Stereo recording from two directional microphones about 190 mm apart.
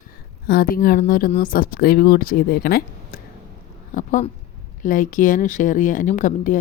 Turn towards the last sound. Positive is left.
turn(degrees=40)  # may be behind; listen again after turning